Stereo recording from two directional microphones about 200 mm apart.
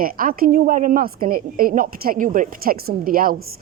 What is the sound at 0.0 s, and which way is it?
Speech, 45° right (ahead or behind).